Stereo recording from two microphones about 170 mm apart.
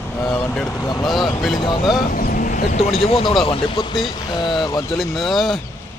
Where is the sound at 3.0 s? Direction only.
35° left (ahead or behind).